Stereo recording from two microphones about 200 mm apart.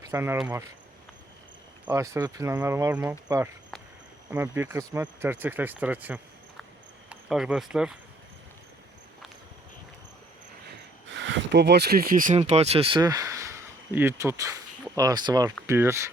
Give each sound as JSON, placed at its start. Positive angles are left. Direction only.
{"t": 0.0, "sound": "speech", "side_deg": -15}
{"t": 1.8, "sound": "speech", "side_deg": -10}
{"t": 11.1, "sound": "speech", "side_deg": -65}
{"t": 12.4, "sound": "speech", "side_deg": -30}